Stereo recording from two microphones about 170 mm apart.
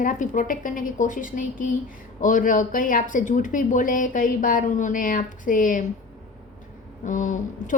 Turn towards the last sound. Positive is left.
turn(degrees=50)  # may be behind; listen again after turning